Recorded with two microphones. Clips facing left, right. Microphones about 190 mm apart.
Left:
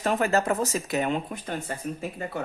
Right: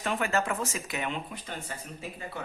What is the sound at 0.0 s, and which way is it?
Speech, 40° left (ahead or behind).